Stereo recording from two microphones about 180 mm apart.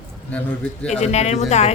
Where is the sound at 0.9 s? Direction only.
40° left (ahead or behind).